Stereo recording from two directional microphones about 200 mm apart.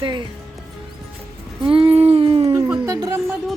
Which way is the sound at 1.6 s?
30° right (ahead or behind).